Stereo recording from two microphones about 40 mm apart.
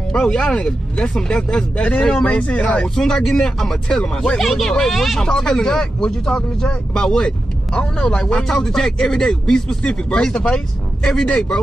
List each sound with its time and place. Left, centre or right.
0.1 s speech: centre
2.2 s speech: left
4.4 s speech: centre
5.2 s speech: centre
8.5 s speech: centre